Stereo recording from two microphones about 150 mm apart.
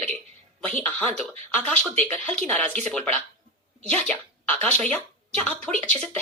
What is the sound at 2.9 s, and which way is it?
Speech, 5° left (ahead or behind).